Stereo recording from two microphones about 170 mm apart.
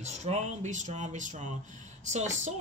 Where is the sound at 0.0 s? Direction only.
40° right (ahead or behind).